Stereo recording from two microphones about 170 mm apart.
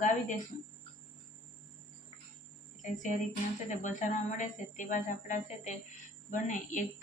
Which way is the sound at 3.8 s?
45° left (ahead or behind).